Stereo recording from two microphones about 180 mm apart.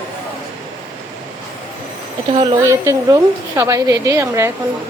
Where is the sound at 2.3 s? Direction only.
30° right (ahead or behind).